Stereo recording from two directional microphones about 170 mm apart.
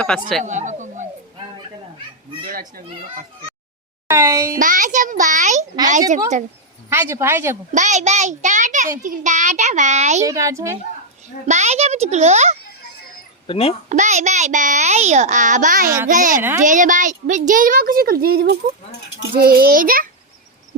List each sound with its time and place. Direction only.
0.0 s speech: 5° left (ahead or behind)
0.4 s a sound: 45° right (ahead or behind)
2.4 s a child's voice: 55° right (ahead or behind)
4.1 s a child's voice: 20° right (ahead or behind)
4.5 s a child's voice: 50° right (ahead or behind)
6.9 s speech: 15° right (ahead or behind)
7.7 s a child's voice: 45° right (ahead or behind)
10.2 s speech: 20° right (ahead or behind)
11.4 s a child's voice: 40° right (ahead or behind)
13.5 s a child's voice: 35° left (ahead or behind)
13.9 s a child's voice: 45° right (ahead or behind)
16.4 s speech: 15° right (ahead or behind)
16.6 s a child's voice: 50° right (ahead or behind)